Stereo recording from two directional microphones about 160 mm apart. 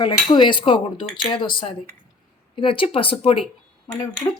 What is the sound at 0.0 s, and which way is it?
Cutlery, 30° left (ahead or behind).